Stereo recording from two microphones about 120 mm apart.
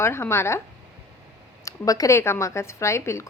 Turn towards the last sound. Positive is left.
turn(degrees=25)  # may be behind; listen again after turning